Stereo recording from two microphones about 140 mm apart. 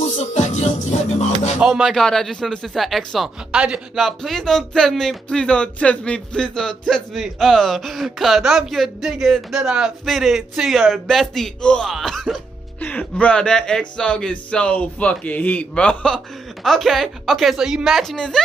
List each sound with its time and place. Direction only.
0.2 s music: 55° left (ahead or behind)
1.6 s speech: 5° right (ahead or behind)